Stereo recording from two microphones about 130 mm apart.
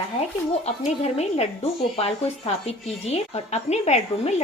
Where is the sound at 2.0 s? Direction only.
50° left (ahead or behind).